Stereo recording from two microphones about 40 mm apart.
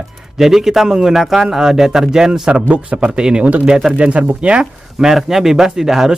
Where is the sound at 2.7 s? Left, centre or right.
Right.